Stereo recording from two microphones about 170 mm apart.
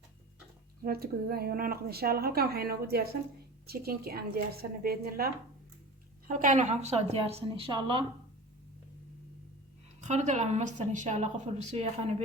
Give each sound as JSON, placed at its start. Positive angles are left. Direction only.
{"t": 0.9, "sound": "a woman's voice", "side_deg": -60}
{"t": 6.2, "sound": "a woman's voice", "side_deg": -50}
{"t": 10.0, "sound": "a woman's voice", "side_deg": -45}